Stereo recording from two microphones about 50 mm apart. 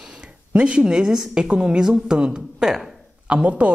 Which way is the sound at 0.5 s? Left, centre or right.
Right.